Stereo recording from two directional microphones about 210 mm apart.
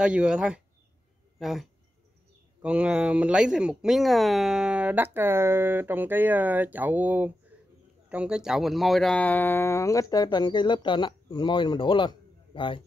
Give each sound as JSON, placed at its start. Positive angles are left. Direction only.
{"t": 0.0, "sound": "speech", "side_deg": -5}